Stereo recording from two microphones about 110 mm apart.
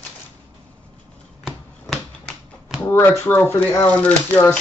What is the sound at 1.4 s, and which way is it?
Typewriter, 5° left (ahead or behind).